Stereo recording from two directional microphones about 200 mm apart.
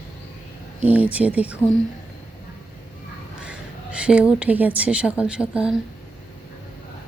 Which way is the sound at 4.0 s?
5° right (ahead or behind).